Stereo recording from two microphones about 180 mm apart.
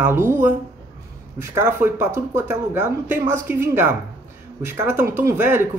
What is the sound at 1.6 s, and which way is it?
Speech, 15° right (ahead or behind).